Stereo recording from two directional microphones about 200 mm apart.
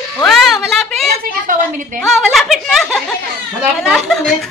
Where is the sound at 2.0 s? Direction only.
Centre (ahead or behind).